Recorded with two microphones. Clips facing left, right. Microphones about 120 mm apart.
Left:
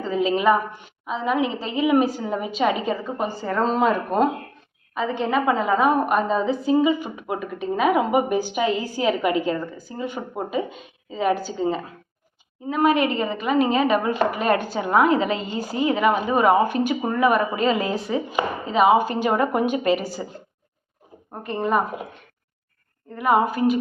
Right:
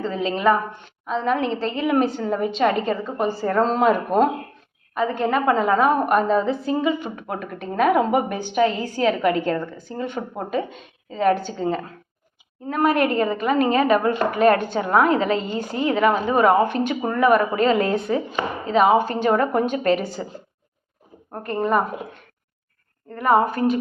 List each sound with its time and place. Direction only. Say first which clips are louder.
0.0 s a woman's voice: left 1 dB; 5° left (ahead or behind)
14.3 s speech: right 6 dB; 40° right (ahead or behind)
14.5 s a woman's voice: right 1 dB; 15° left (ahead or behind)
15.3 s speech: right 3 dB; 40° right (ahead or behind)
15.5 s a woman's voice: even; 5° left (ahead or behind)
21.4 s a woman's voice: right 1 dB; centre (ahead or behind)
23.5 s a woman's voice: even; 5° left (ahead or behind)